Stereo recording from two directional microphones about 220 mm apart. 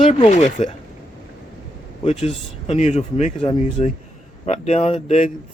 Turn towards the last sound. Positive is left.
turn(degrees=30)  # may be behind; listen again after turning